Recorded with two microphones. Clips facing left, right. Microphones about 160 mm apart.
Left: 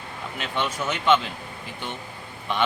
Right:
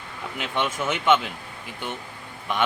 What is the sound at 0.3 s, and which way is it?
Speech, 15° right (ahead or behind).